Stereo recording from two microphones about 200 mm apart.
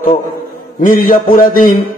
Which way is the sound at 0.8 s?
45° left (ahead or behind).